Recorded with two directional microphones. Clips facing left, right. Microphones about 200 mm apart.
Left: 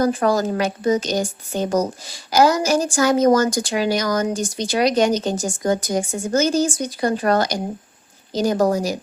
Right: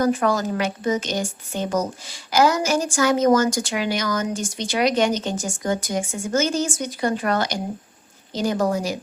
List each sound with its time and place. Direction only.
0.0 s a woman's voice: 35° left (ahead or behind)